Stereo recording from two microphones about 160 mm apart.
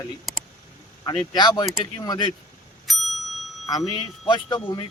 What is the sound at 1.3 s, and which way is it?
Speech, 25° left (ahead or behind).